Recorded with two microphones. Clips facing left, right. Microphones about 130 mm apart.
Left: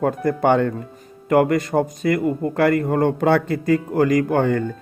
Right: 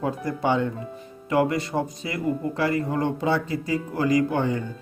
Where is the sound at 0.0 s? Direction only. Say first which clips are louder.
Left 7 dB; 55° left (ahead or behind).